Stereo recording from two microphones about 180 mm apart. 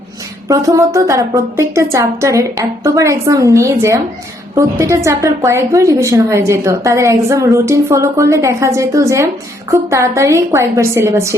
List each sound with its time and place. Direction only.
0.4 s a woman's voice: 20° right (ahead or behind)